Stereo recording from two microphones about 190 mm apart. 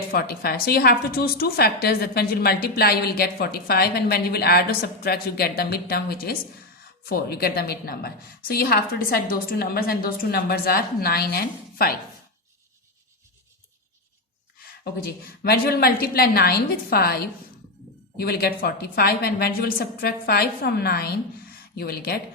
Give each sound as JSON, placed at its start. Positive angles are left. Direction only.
{"t": 0.1, "sound": "a woman's voice", "side_deg": 55}
{"t": 15.0, "sound": "a woman's voice", "side_deg": 55}
{"t": 18.2, "sound": "a woman's voice", "side_deg": 55}